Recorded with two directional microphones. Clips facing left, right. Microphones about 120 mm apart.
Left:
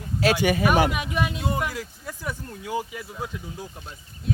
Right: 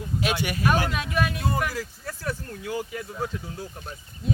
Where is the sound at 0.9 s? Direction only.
20° left (ahead or behind).